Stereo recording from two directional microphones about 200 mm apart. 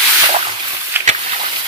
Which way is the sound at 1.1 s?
35° right (ahead or behind).